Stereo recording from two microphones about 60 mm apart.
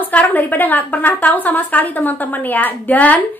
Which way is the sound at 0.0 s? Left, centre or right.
Left.